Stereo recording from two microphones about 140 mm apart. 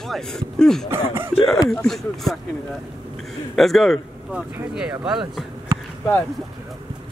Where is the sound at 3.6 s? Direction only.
Centre (ahead or behind).